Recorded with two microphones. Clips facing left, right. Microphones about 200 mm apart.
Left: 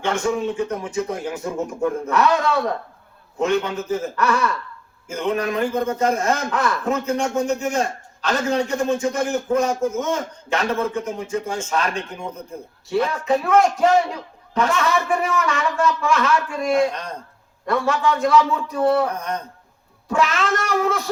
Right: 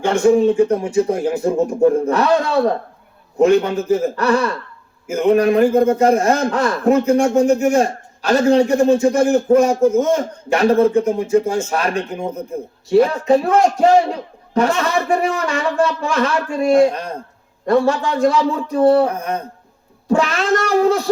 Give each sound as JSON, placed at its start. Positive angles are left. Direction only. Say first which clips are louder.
{"t": 0.0, "sound": "a man's voice", "louder": "right 9 dB", "side_deg": -30}
{"t": 5.0, "sound": "speech", "louder": "right 8 dB", "side_deg": -10}
{"t": 5.3, "sound": "a man's voice", "louder": "right 9 dB", "side_deg": -35}
{"t": 11.4, "sound": "a sound", "louder": "right 7 dB", "side_deg": -10}
{"t": 11.7, "sound": "a man's voice", "louder": "right 4 dB", "side_deg": -35}
{"t": 16.9, "sound": "a sound", "louder": "right 5 dB", "side_deg": -10}
{"t": 17.7, "sound": "a man's voice", "louder": "right 5 dB", "side_deg": -30}
{"t": 19.1, "sound": "a sound", "louder": "right 4 dB", "side_deg": -10}
{"t": 20.1, "sound": "a man's voice", "louder": "right 5 dB", "side_deg": -35}